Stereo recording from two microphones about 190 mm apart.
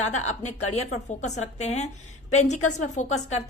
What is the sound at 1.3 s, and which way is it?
A woman's voice, 35° left (ahead or behind).